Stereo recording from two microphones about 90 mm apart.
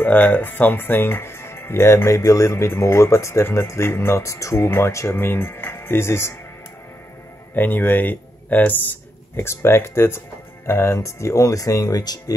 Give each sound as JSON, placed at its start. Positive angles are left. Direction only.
{"t": 0.0, "sound": "speech", "side_deg": 20}
{"t": 7.5, "sound": "speech", "side_deg": 20}